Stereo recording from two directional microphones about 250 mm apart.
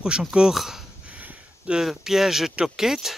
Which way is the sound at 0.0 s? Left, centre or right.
Centre.